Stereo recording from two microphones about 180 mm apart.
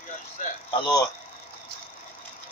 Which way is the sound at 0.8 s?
20° left (ahead or behind).